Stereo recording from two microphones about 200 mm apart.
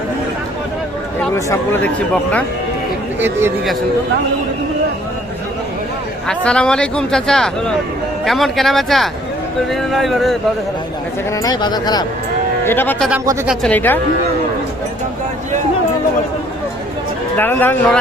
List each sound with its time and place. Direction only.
1.5 s speech: 10° left (ahead or behind)
3.2 s speech: 10° right (ahead or behind)
6.2 s speech: 5° left (ahead or behind)
11.4 s speech: 20° left (ahead or behind)
12.6 s speech: 10° left (ahead or behind)
13.1 s speech: 10° right (ahead or behind)
13.6 s speech: 10° left (ahead or behind)
17.3 s speech: 10° left (ahead or behind)